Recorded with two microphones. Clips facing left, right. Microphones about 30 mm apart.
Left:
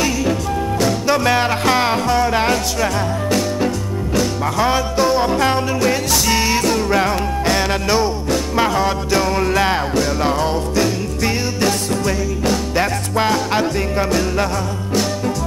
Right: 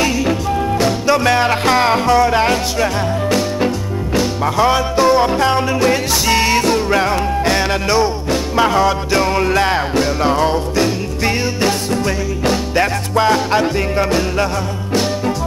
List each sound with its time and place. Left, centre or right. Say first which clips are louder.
0.0 s music: right 2 dB; centre
3.6 s music: right 2 dB; centre